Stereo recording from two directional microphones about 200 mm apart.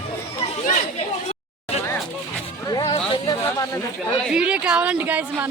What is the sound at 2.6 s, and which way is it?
Music, 20° left (ahead or behind).